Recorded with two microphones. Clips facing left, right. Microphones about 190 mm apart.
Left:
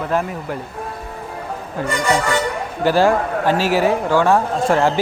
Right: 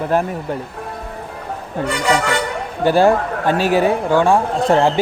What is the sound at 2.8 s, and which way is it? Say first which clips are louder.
A man's voice: right 2 dB; 20° right (ahead or behind).